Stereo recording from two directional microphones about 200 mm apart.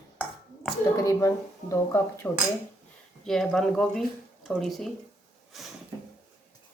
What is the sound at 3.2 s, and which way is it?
Speech, centre (ahead or behind).